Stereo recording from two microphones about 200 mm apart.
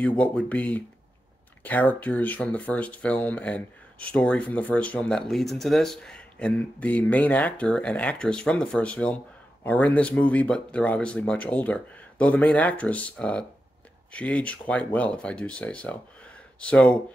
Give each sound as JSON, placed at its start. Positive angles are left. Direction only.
{"t": 0.2, "sound": "speech", "side_deg": 5}